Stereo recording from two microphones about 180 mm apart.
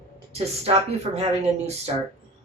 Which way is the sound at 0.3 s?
35° right (ahead or behind).